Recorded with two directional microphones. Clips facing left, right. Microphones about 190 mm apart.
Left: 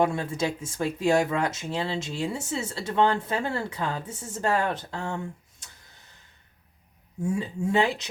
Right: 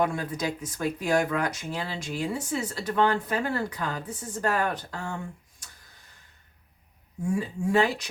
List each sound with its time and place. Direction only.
0.0 s speech: 25° left (ahead or behind)
7.3 s speech: 25° left (ahead or behind)